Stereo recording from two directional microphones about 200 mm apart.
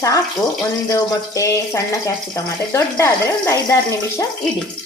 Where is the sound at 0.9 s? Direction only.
15° left (ahead or behind).